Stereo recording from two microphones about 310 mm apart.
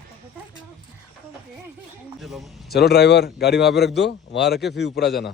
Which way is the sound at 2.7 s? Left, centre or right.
Left.